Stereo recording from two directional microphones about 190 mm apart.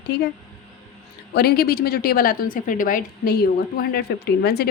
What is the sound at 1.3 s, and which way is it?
A woman's voice, 55° left (ahead or behind).